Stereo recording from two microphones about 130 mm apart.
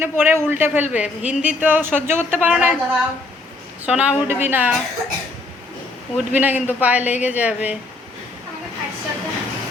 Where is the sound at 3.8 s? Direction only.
10° right (ahead or behind).